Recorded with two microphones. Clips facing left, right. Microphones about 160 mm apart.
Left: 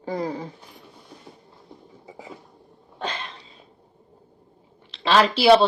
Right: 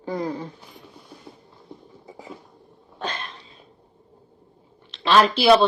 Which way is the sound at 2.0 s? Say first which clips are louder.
Even; 10° left (ahead or behind).